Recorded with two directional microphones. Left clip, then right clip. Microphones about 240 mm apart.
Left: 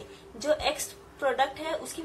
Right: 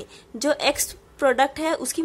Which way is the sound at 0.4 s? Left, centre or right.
Right.